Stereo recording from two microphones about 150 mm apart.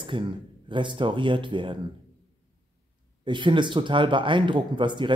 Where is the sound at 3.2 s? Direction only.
30° right (ahead or behind).